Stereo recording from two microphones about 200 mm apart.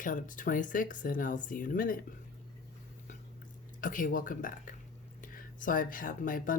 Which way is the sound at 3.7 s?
40° left (ahead or behind).